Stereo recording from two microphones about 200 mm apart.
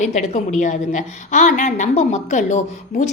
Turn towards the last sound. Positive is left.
turn(degrees=35)  # may be behind; listen again after turning